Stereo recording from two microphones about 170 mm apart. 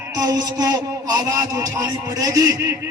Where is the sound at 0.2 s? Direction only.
20° right (ahead or behind).